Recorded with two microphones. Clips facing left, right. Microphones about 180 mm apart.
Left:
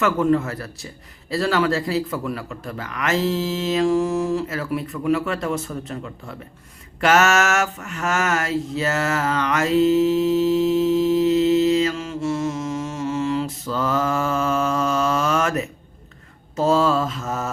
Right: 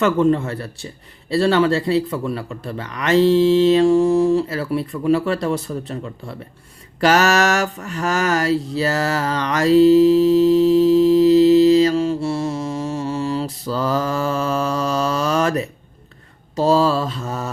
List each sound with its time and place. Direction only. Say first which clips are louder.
0.0 s a man's voice: right 3 dB; 30° right (ahead or behind)
7.0 s mantra: right 2 dB; 35° right (ahead or behind)